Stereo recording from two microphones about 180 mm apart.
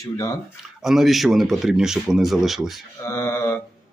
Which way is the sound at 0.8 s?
Centre (ahead or behind).